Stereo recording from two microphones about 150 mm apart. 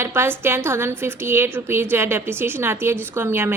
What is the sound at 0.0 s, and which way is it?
A woman's voice, 15° right (ahead or behind).